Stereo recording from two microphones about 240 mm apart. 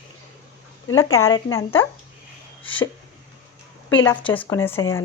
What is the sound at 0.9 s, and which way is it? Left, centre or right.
Speech, centre.